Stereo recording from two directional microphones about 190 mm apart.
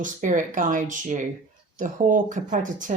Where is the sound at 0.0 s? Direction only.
40° right (ahead or behind).